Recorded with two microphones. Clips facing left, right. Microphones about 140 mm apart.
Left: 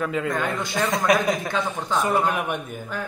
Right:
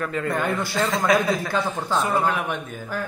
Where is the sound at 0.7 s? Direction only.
15° left (ahead or behind).